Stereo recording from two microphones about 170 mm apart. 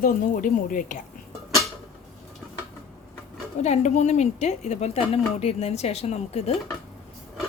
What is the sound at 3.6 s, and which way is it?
Speech, 40° left (ahead or behind).